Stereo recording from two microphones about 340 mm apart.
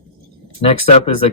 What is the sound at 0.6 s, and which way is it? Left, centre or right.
Speech, centre.